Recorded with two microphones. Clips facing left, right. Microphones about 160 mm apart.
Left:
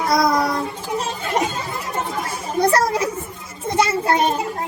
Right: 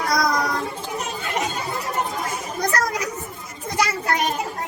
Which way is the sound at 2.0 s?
30° left (ahead or behind).